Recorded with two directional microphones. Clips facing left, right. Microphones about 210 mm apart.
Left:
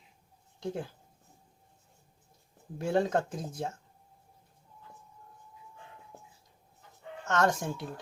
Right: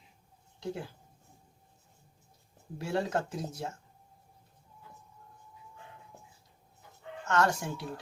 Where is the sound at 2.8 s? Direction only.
50° left (ahead or behind).